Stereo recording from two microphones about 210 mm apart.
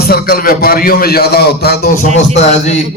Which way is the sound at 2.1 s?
30° left (ahead or behind).